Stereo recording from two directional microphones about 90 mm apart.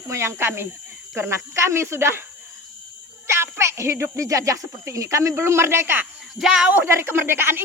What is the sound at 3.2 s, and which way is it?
Speech, 30° right (ahead or behind).